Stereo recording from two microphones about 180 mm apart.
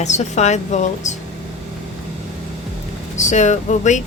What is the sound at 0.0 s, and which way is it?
Speech, 40° left (ahead or behind).